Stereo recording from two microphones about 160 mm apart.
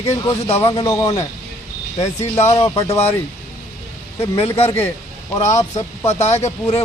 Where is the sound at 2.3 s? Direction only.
20° left (ahead or behind).